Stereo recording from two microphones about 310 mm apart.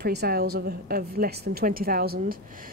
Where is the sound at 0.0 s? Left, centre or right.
Right.